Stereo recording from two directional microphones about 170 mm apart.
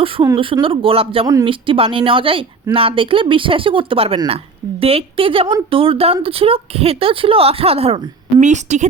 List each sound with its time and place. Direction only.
0.0 s speech: 30° right (ahead or behind)